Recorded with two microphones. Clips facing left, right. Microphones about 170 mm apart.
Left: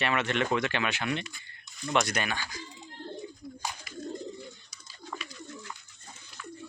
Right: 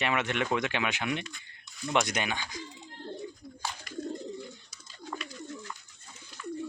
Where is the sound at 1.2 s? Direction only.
5° left (ahead or behind).